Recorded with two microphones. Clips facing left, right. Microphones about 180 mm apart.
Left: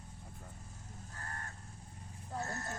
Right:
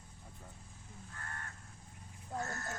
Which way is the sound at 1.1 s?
35° left (ahead or behind).